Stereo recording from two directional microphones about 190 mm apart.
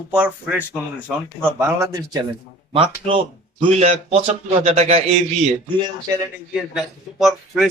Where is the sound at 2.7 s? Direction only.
30° right (ahead or behind).